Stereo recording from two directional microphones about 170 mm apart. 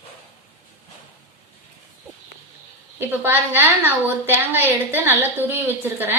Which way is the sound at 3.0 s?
15° right (ahead or behind).